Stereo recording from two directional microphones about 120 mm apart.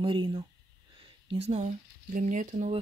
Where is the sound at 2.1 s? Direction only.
90° right.